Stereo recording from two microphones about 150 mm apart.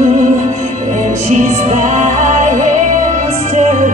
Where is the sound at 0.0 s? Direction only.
50° right (ahead or behind).